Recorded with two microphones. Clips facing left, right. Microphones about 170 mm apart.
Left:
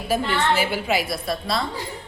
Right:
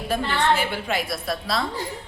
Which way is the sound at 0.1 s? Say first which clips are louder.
Left 1 dB; 5° left (ahead or behind).